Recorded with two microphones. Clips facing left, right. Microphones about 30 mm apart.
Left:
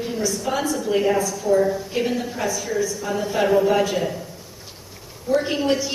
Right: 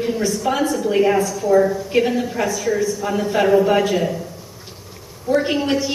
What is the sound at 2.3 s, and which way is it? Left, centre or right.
Speech, right.